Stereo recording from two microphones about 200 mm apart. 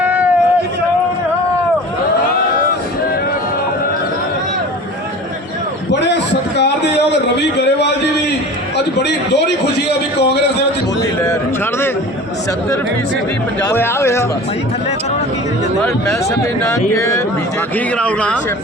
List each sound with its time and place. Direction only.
0.0 s a sound: 5° right (ahead or behind)
5.9 s a sound: 60° left (ahead or behind)
9.0 s a man's voice: 60° left (ahead or behind)
11.3 s speech: 10° left (ahead or behind)
13.6 s speech: 15° left (ahead or behind)
17.0 s speech: 15° left (ahead or behind)